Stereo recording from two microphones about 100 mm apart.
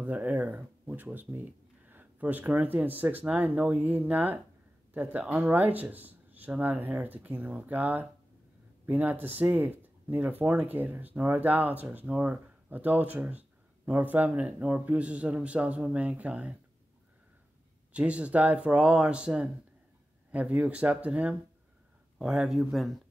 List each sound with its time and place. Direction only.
0.0 s speech: 15° right (ahead or behind)
17.9 s speech: 10° right (ahead or behind)